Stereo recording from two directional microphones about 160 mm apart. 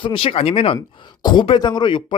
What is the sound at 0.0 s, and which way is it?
Speech, 35° left (ahead or behind).